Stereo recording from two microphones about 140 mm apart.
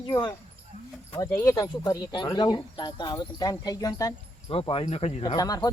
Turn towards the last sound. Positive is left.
turn(degrees=25)  # may be behind; listen again after turning